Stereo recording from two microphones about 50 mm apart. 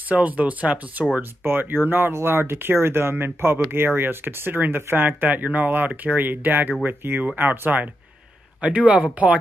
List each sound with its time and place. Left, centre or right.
0.1 s speech: right
1.4 s speech: right
8.5 s speech: right